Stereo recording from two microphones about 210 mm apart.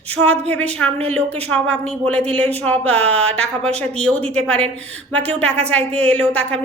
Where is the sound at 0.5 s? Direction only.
5° left (ahead or behind).